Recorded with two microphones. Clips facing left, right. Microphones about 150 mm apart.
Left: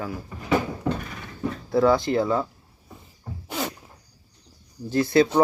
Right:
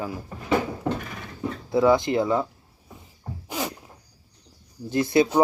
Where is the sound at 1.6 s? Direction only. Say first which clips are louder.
Even; 20° right (ahead or behind).